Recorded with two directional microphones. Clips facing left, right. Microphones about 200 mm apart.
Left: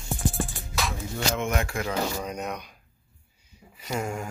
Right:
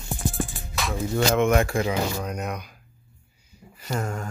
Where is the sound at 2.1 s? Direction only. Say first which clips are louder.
Right 2 dB; centre (ahead or behind).